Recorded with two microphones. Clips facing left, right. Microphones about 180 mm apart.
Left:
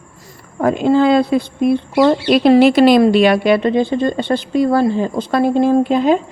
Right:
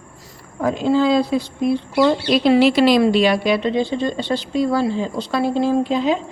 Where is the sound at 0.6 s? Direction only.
55° left (ahead or behind).